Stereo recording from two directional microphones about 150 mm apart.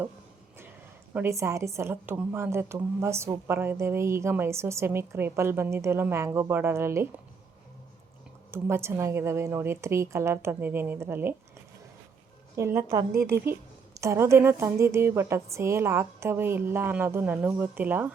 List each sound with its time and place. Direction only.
1.1 s a woman's voice: 15° right (ahead or behind)
8.4 s a woman's voice: 15° right (ahead or behind)
12.5 s a woman's voice: 15° right (ahead or behind)